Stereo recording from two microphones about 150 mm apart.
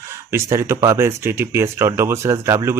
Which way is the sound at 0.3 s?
20° right (ahead or behind).